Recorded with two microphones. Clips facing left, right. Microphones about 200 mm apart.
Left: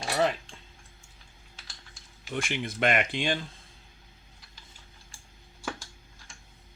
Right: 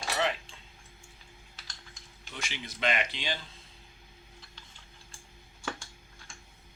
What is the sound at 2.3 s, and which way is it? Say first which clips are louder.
Speech: left 10 dB; 55° left (ahead or behind).